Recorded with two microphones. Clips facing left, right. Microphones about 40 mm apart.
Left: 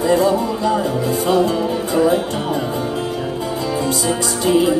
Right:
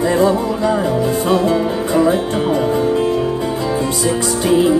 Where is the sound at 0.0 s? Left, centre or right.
Right.